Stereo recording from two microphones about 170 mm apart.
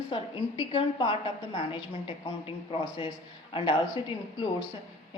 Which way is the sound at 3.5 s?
30° left (ahead or behind).